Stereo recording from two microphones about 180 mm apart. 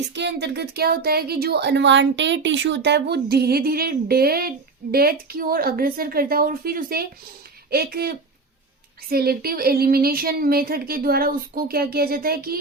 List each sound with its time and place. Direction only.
0.1 s speech: 75° right (ahead or behind); by 12.5 s 55° right (ahead or behind)